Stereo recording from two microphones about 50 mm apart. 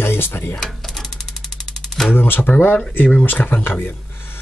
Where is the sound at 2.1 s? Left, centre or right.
Left.